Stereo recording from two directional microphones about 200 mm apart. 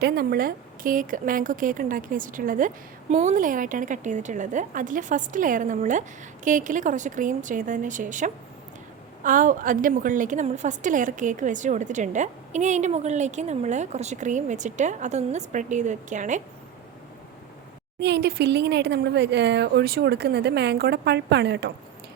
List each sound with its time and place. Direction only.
0.0 s a woman's voice: 50° right (ahead or behind)
18.0 s speech: 55° right (ahead or behind)